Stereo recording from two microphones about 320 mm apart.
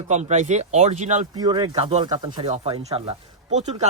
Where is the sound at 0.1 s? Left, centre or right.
Right.